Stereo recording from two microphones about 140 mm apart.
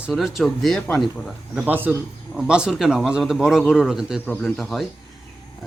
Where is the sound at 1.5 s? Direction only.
10° right (ahead or behind).